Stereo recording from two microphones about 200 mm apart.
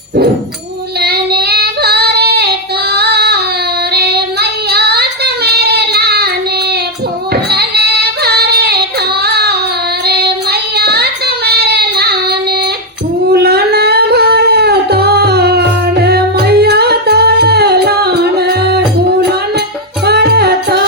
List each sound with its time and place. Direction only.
1.0 s child singing: 50° right (ahead or behind)
2.9 s female singing: 55° right (ahead or behind)
3.9 s child singing: 55° right (ahead or behind)
7.5 s singing: 55° right (ahead or behind)
10.1 s child singing: 55° right (ahead or behind)
13.3 s singing: 50° right (ahead or behind)
16.0 s music: 55° right (ahead or behind)
20.1 s music: 55° right (ahead or behind)